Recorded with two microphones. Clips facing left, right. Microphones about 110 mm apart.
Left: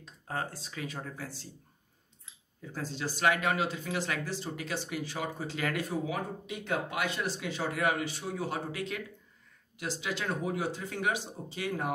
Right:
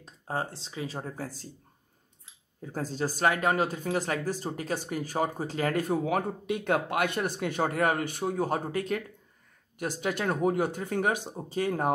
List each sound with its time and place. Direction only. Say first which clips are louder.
0.0 s speech: right 3 dB; 30° right (ahead or behind)
2.6 s speech: right 5 dB; 45° right (ahead or behind)